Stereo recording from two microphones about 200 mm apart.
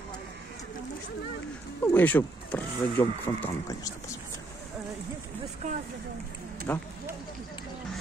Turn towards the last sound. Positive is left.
turn(degrees=10)  # may be behind; listen again after turning